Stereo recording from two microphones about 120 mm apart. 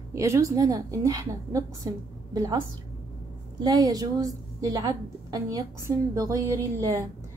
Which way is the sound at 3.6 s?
35° right (ahead or behind).